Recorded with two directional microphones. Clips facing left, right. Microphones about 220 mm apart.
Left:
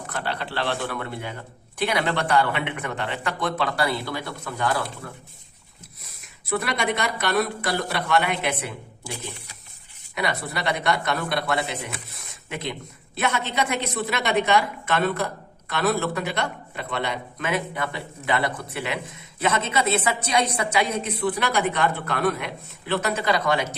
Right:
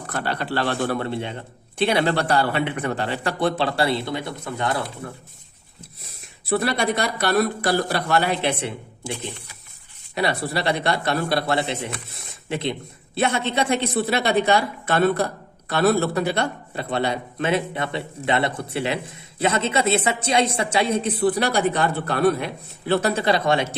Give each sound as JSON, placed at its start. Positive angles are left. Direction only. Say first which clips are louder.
{"t": 0.1, "sound": "a man's voice", "louder": "right 5 dB", "side_deg": -45}
{"t": 6.4, "sound": "a man's voice", "louder": "right 4 dB", "side_deg": -35}